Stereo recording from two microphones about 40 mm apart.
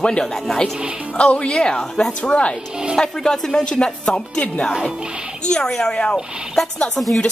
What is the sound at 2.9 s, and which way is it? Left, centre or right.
Speech, centre.